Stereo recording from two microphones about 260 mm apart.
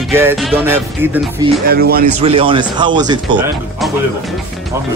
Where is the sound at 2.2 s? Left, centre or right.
Centre.